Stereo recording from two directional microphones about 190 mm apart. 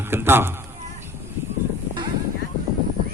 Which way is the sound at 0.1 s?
10° right (ahead or behind).